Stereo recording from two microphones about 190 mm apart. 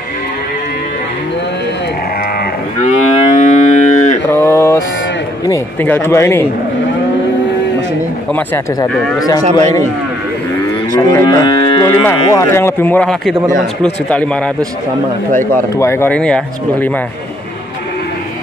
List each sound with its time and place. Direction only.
2.8 s moo: 40° left (ahead or behind)
4.3 s mantra: 15° left (ahead or behind)
5.5 s speech: 10° left (ahead or behind)
11.0 s moo: 15° left (ahead or behind)
13.8 s speech: 5° left (ahead or behind)
15.8 s moo: 15° left (ahead or behind)